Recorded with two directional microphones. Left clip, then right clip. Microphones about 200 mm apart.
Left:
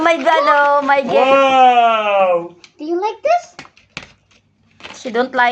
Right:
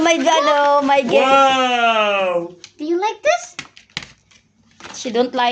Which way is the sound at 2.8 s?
40° right (ahead or behind).